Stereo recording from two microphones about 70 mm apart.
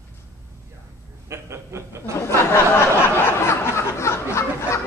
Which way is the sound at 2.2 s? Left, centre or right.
Left.